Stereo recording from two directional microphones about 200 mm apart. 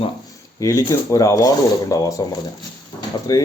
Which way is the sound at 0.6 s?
15° left (ahead or behind).